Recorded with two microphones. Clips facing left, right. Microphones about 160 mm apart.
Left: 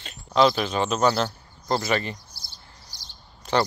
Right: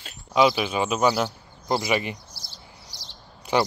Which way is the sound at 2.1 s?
80° right.